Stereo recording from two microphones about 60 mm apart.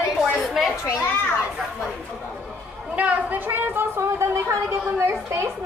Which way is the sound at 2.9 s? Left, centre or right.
Right.